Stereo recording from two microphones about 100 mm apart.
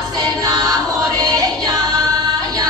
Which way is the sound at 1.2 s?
40° right (ahead or behind).